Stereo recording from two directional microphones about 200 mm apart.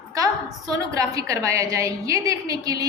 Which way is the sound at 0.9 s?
15° right (ahead or behind).